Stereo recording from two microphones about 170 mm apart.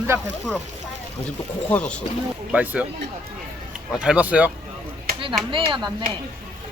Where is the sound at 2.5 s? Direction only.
10° right (ahead or behind).